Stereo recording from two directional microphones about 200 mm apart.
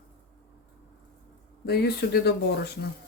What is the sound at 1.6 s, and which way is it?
Speech, 55° left (ahead or behind).